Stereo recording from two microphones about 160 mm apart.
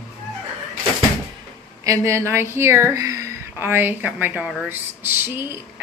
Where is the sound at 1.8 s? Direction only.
20° right (ahead or behind).